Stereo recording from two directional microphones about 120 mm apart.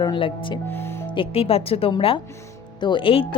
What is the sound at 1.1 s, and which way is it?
Speech, 50° left (ahead or behind).